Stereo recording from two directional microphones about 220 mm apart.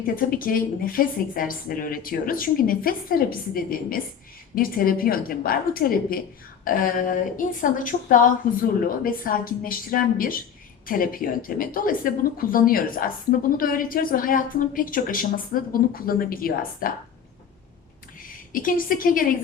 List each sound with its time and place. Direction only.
0.0 s speech: 40° left (ahead or behind)
18.5 s speech: 40° left (ahead or behind)